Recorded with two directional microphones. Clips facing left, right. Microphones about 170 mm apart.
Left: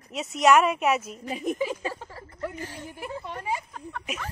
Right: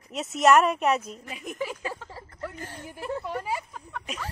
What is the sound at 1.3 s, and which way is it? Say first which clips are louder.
Speech: left 10 dB; 35° left (ahead or behind).